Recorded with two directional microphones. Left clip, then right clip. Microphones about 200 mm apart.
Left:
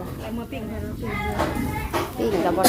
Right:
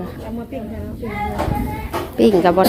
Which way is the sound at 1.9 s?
50° right (ahead or behind).